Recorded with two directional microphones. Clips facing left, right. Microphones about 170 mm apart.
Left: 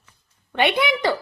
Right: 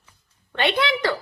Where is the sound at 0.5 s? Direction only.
20° left (ahead or behind).